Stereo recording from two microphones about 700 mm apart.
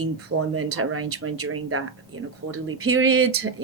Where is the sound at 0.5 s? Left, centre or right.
Centre.